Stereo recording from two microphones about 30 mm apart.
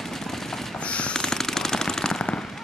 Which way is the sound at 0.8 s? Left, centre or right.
Left.